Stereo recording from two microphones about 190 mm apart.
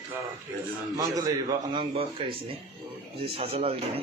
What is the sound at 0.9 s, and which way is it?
A man's voice, 20° right (ahead or behind).